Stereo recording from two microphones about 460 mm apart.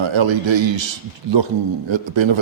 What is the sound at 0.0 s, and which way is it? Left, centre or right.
Speech, right.